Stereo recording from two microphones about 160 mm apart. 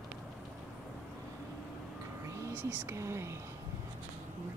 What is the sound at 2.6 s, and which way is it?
Speech, 10° right (ahead or behind).